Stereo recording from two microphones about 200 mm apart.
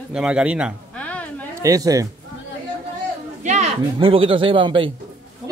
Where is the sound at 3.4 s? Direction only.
35° right (ahead or behind).